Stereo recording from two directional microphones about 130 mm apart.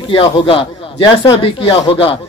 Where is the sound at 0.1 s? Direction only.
45° left (ahead or behind).